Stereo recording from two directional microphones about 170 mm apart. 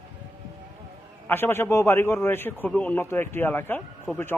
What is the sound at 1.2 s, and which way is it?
A man's voice, 10° left (ahead or behind).